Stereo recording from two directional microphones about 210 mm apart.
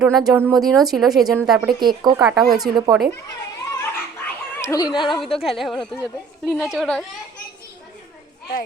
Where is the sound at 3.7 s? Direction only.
10° left (ahead or behind).